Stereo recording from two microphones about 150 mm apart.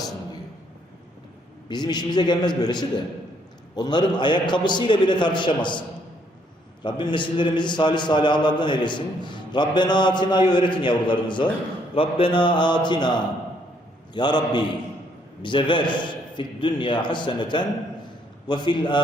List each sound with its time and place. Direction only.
1.6 s a man's voice: 30° left (ahead or behind)
6.8 s a man's voice: 30° left (ahead or behind)